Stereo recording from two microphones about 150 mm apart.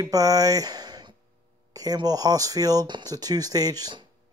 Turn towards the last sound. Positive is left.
turn(degrees=-25)  # may be behind; listen again after turning